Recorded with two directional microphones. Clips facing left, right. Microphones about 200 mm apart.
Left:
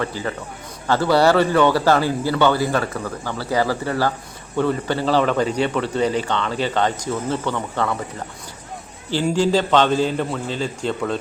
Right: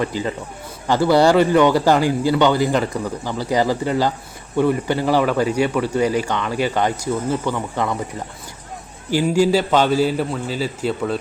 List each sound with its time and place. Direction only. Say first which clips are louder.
0.0 s a man's voice: right 3 dB; 15° right (ahead or behind)
9.0 s a man's voice: right 3 dB; 10° right (ahead or behind)